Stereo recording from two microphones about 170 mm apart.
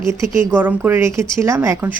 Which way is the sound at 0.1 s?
15° right (ahead or behind).